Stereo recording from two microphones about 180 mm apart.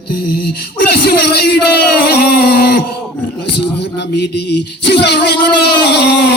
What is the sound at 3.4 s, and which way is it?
Music, 70° left (ahead or behind).